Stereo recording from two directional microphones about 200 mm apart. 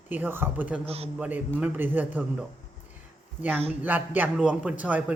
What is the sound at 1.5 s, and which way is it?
Speech, 10° right (ahead or behind).